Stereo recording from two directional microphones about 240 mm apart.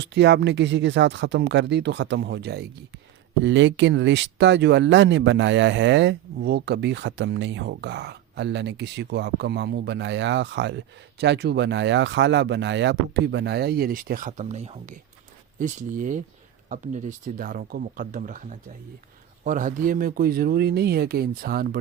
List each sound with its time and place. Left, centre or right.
0.0 s speech: right